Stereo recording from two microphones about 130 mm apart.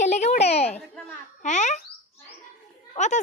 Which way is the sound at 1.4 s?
65° left (ahead or behind).